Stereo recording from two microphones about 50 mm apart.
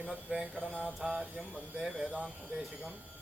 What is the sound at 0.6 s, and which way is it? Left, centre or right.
Mantra, left.